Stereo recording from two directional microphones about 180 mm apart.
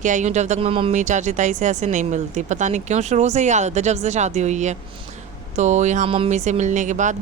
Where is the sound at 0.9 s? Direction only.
45° right (ahead or behind).